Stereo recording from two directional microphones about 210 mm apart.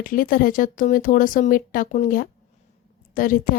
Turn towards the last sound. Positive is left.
turn(degrees=40)  # may be behind; listen again after turning